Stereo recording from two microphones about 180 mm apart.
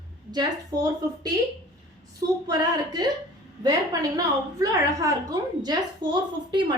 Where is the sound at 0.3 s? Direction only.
20° right (ahead or behind).